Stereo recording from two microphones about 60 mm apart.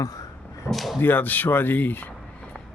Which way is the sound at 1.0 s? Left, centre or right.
Left.